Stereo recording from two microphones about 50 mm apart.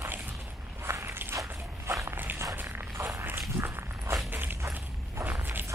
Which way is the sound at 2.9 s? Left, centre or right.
Right.